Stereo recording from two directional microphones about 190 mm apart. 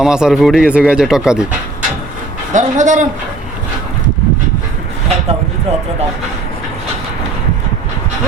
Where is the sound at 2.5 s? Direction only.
40° right (ahead or behind).